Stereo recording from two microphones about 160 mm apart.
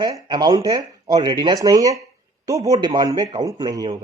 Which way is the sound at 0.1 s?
25° right (ahead or behind).